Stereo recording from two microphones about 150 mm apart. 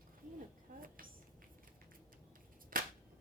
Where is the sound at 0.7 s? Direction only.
70° right (ahead or behind).